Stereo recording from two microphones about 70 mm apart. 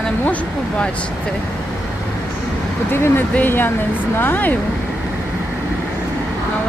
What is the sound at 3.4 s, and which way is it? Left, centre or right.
Speech, left.